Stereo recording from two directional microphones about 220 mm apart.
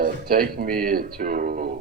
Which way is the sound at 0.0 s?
40° right (ahead or behind).